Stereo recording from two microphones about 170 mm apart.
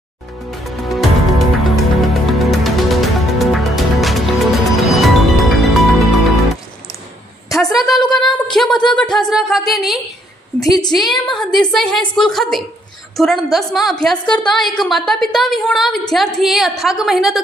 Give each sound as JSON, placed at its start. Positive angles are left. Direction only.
{"t": 0.6, "sound": "music", "side_deg": 0}
{"t": 7.5, "sound": "a sound", "side_deg": 0}
{"t": 9.1, "sound": "a woman's voice", "side_deg": 0}
{"t": 10.6, "sound": "a woman's voice", "side_deg": 20}
{"t": 10.8, "sound": "a woman's voice", "side_deg": 0}